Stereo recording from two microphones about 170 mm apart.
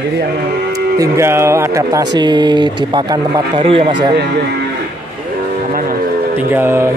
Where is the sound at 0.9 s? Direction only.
20° right (ahead or behind).